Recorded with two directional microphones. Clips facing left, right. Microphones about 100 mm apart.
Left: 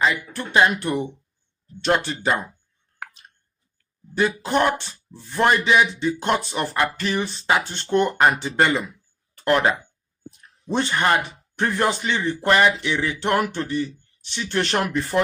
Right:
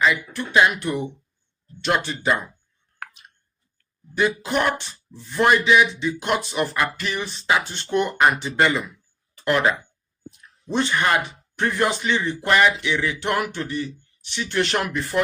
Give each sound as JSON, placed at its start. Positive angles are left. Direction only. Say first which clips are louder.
{"t": 0.0, "sound": "speech", "louder": "right 1 dB", "side_deg": 30}
{"t": 4.1, "sound": "speech", "louder": "left 1 dB", "side_deg": 35}
{"t": 10.7, "sound": "speech", "louder": "left 1 dB", "side_deg": 35}